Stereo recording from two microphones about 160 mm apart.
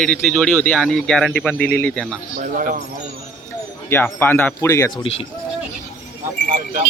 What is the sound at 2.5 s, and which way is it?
Speech, 60° right (ahead or behind).